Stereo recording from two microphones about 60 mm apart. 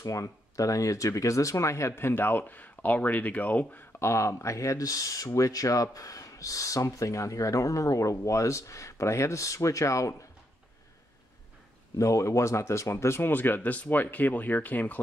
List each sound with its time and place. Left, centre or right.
0.0 s speech: left
4.0 s speech: left
12.0 s speech: left
13.3 s speech: left